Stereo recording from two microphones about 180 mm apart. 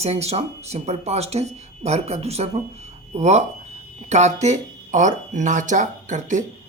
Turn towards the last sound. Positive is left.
turn(degrees=-45)  # may be behind; listen again after turning